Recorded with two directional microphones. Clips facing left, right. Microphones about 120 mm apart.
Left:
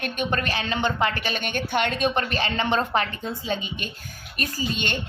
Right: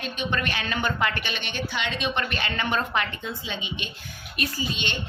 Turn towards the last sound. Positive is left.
turn(degrees=45)  # may be behind; listen again after turning